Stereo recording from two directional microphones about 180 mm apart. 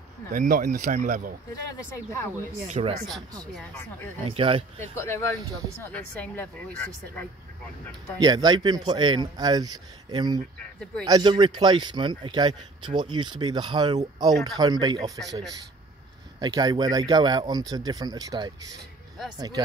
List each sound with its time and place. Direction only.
0.3 s speech: 45° right (ahead or behind)
2.8 s speech: 35° right (ahead or behind)
4.3 s speech: 30° right (ahead or behind)
4.7 s speech: 15° left (ahead or behind)
8.2 s speech: 20° right (ahead or behind)
16.3 s speech: 20° right (ahead or behind)